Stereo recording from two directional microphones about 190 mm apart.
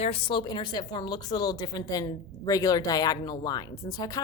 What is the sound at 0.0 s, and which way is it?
A woman's voice, 30° left (ahead or behind).